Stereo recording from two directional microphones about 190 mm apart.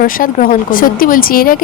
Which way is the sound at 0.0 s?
45° left (ahead or behind).